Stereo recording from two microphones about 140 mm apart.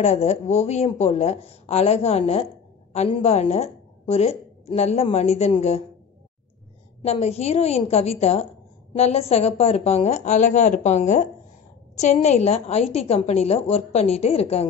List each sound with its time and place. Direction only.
0.0 s a woman's voice: 50° left (ahead or behind)
7.1 s a woman's voice: 45° left (ahead or behind)